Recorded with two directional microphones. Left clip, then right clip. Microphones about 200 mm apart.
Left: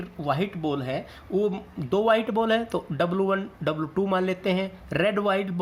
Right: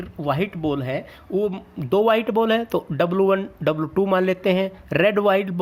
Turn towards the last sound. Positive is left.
turn(degrees=-40)  # may be behind; listen again after turning